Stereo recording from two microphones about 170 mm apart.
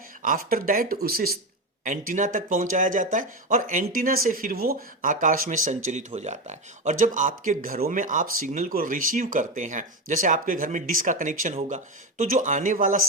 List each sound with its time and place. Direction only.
0.2 s speech: 55° right (ahead or behind)
1.8 s speech: 50° right (ahead or behind)